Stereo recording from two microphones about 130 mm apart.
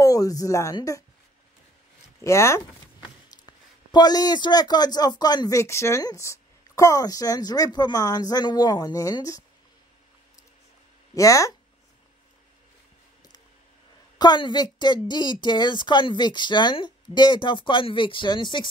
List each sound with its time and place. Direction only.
0.0 s speech: 25° left (ahead or behind)
2.2 s speech: 20° left (ahead or behind)
3.0 s speech: 35° left (ahead or behind)
11.1 s speech: 25° left (ahead or behind)
14.1 s speech: 35° left (ahead or behind)